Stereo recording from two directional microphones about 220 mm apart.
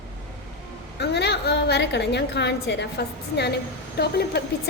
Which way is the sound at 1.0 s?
50° left (ahead or behind).